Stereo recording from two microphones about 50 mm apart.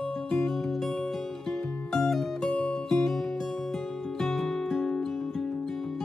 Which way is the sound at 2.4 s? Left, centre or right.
Left.